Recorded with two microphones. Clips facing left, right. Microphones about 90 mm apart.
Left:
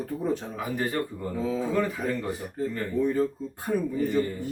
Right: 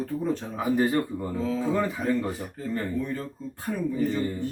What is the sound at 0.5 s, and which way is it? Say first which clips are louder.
Speech: right 5 dB; 25° right (ahead or behind).